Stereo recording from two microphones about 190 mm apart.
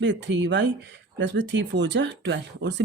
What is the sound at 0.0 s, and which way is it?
Speech, 70° right (ahead or behind).